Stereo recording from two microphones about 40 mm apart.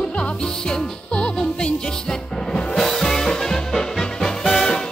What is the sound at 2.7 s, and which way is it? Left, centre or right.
Music, centre.